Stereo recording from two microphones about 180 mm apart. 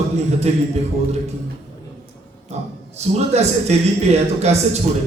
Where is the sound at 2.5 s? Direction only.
35° right (ahead or behind).